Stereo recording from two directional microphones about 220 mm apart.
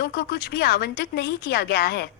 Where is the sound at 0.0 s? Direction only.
45° left (ahead or behind).